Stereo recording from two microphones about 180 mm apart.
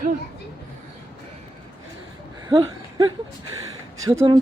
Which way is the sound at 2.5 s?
25° right (ahead or behind).